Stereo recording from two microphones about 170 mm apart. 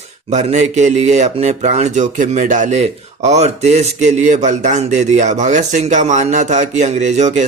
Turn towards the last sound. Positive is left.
turn(degrees=-45)  # may be behind; listen again after turning